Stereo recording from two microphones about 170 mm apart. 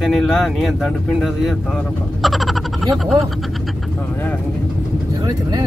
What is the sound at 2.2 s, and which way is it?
Frog, centre (ahead or behind).